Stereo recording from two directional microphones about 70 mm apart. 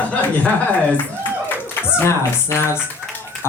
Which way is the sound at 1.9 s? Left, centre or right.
Left.